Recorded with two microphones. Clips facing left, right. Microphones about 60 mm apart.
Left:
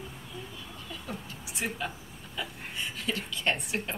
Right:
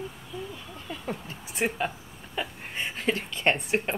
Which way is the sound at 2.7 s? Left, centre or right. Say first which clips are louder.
Right 6 dB; right.